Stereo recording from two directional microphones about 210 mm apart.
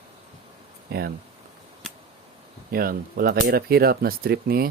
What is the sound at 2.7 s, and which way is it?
Speech, 45° right (ahead or behind).